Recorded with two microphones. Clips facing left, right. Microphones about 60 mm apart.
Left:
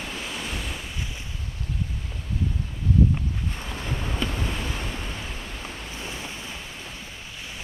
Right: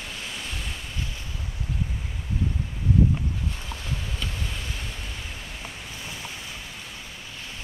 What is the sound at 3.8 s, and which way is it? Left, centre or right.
Boat, left.